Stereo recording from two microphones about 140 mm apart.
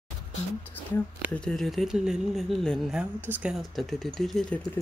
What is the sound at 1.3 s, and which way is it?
Speech, 5° left (ahead or behind).